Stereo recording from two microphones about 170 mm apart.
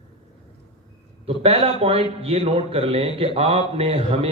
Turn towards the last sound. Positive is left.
turn(degrees=-35)  # may be behind; listen again after turning